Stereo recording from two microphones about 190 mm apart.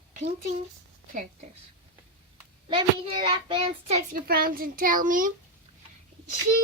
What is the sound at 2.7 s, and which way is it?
Speech, 25° right (ahead or behind).